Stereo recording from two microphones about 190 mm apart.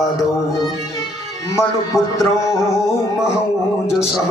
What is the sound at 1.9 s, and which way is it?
Speech, 15° left (ahead or behind).